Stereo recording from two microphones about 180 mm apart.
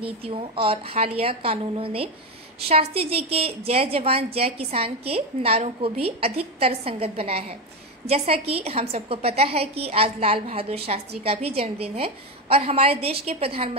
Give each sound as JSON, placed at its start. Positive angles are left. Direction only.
{"t": 0.0, "sound": "a woman's voice", "side_deg": -30}